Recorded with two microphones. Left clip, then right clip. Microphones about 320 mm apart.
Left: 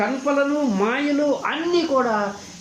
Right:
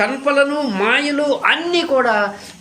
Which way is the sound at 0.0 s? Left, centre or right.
Right.